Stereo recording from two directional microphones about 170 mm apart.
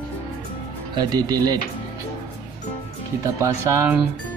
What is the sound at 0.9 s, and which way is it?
Speech, 25° right (ahead or behind).